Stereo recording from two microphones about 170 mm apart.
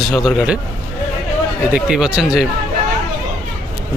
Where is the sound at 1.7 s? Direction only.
5° right (ahead or behind).